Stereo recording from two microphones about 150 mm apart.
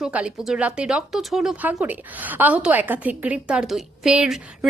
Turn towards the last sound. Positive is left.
turn(degrees=-5)  # may be behind; listen again after turning